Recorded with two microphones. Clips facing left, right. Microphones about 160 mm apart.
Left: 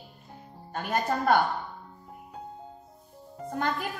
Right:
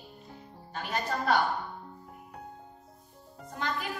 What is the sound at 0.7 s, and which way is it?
Speech, 50° left (ahead or behind).